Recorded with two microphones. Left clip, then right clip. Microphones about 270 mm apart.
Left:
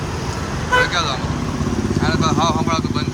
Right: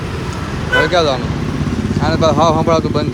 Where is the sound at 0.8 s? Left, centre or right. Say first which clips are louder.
Right 7 dB; centre.